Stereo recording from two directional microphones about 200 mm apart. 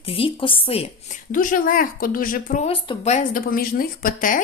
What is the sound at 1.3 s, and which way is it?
Speech, 45° left (ahead or behind).